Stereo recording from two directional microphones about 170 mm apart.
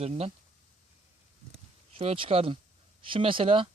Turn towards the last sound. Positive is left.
turn(degrees=-30)  # may be behind; listen again after turning